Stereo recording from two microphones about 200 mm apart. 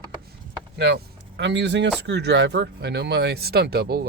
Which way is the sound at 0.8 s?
60° right (ahead or behind).